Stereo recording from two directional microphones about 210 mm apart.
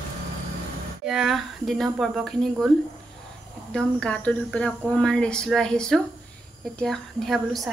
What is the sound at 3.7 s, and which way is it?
Speech, 5° left (ahead or behind).